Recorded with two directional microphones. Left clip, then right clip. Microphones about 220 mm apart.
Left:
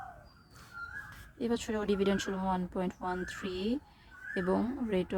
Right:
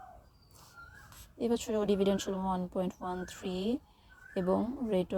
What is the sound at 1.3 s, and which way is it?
Speech, 15° right (ahead or behind).